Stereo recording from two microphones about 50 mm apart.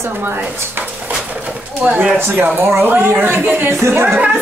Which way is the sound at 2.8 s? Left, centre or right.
Right.